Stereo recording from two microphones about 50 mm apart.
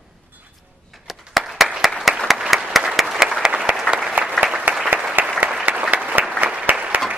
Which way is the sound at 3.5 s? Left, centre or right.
Right.